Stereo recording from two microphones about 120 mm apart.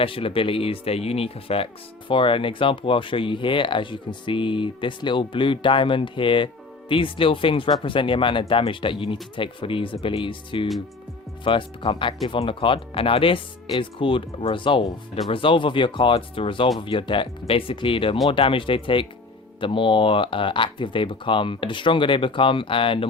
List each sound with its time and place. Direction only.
0.0 s speech: 50° left (ahead or behind)